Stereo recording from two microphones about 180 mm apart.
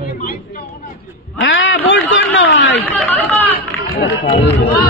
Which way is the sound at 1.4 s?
90° left.